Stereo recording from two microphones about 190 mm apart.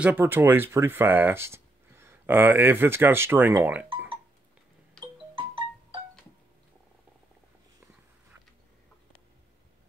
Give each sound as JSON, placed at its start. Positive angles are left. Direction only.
{"t": 0.0, "sound": "speech", "side_deg": -10}
{"t": 5.0, "sound": "music", "side_deg": -25}